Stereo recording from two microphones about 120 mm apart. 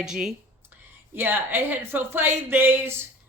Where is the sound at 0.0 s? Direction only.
5° right (ahead or behind).